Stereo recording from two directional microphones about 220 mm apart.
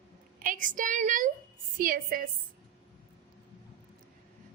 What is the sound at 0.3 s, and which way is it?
A woman's voice, 35° right (ahead or behind).